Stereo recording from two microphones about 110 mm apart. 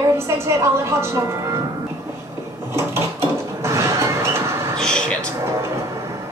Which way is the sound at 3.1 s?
25° right (ahead or behind).